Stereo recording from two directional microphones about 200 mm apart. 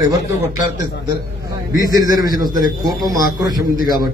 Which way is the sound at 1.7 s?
20° right (ahead or behind).